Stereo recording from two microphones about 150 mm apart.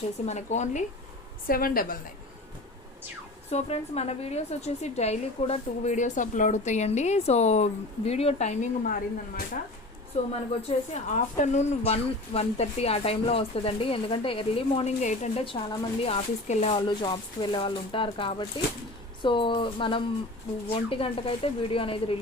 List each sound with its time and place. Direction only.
0.3 s a woman's voice: 50° left (ahead or behind)
1.5 s speech: 75° left (ahead or behind)
3.5 s a woman's voice: 45° left (ahead or behind)
8.9 s speech: 70° left (ahead or behind)
10.1 s a woman's voice: 45° left (ahead or behind)
15.4 s speech: 35° left (ahead or behind)